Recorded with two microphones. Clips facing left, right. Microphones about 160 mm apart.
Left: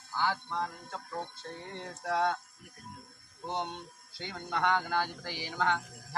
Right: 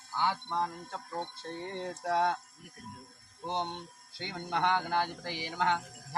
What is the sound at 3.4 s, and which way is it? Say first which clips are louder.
Speech: right 1 dB; 20° right (ahead or behind).